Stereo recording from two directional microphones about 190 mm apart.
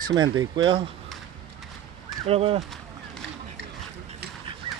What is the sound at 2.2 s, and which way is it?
Speech, 30° right (ahead or behind).